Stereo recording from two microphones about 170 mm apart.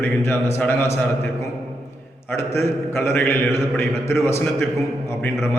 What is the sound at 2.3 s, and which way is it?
A man's voice, 15° left (ahead or behind).